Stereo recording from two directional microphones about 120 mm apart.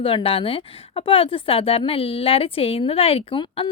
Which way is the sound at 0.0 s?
50° left (ahead or behind).